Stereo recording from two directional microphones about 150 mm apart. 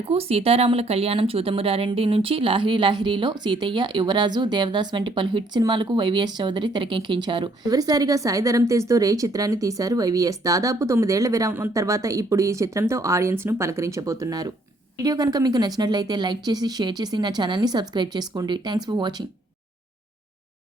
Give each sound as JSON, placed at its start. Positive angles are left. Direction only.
{"t": 0.0, "sound": "speech", "side_deg": -40}